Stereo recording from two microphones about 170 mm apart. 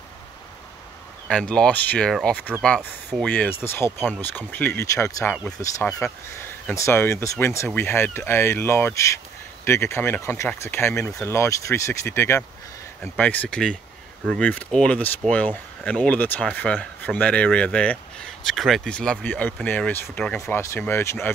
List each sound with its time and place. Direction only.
1.5 s speech: 5° left (ahead or behind)